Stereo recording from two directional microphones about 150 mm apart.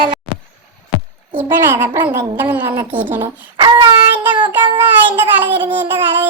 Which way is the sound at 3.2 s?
30° right (ahead or behind).